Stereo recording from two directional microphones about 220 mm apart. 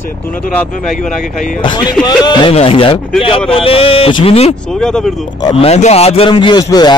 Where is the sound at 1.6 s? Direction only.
20° left (ahead or behind).